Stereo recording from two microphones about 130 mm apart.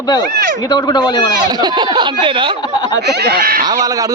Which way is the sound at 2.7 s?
35° left (ahead or behind).